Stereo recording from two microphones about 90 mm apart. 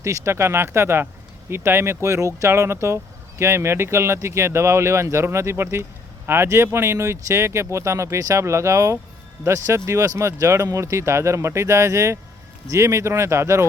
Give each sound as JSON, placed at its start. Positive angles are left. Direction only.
{"t": 0.0, "sound": "speech", "side_deg": -30}